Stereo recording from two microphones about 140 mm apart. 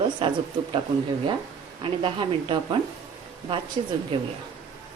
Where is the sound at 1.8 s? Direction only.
40° right (ahead or behind).